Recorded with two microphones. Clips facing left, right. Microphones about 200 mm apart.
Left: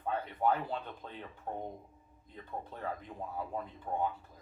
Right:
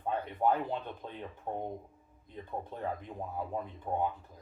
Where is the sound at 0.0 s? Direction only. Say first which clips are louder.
Right 2 dB; 15° right (ahead or behind).